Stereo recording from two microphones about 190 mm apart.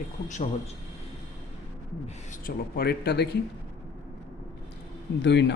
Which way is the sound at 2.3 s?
50° left (ahead or behind).